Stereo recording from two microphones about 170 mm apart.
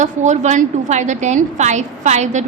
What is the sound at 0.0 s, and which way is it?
A woman's voice, 45° right (ahead or behind).